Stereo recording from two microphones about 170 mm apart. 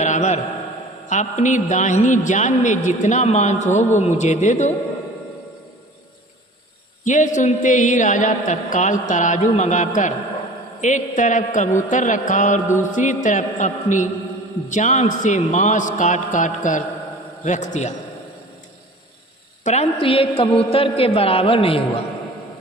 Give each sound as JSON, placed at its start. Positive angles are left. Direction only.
{"t": 0.0, "sound": "a sound", "side_deg": 45}
{"t": 1.0, "sound": "a man's voice", "side_deg": 45}
{"t": 7.0, "sound": "a man's voice", "side_deg": 45}
{"t": 19.6, "sound": "a woman's voice", "side_deg": 40}